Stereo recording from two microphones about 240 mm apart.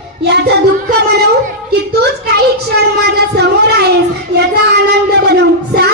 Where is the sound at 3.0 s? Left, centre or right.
Right.